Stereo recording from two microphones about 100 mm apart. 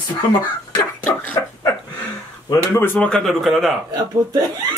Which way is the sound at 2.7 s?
20° left (ahead or behind).